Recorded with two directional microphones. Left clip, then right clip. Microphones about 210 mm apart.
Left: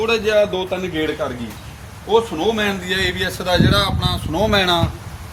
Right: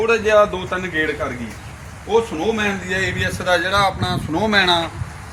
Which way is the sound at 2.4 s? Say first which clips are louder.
Left 1 dB; 20° left (ahead or behind).